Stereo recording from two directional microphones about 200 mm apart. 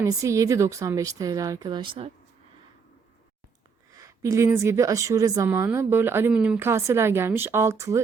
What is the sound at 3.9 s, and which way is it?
Speech, 15° right (ahead or behind).